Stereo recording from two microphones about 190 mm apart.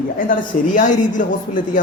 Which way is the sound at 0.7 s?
40° left (ahead or behind).